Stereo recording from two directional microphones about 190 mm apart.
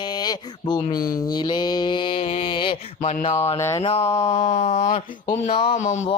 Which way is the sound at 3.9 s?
30° left (ahead or behind).